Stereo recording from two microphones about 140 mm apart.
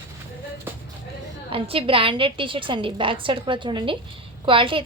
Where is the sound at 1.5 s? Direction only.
40° right (ahead or behind).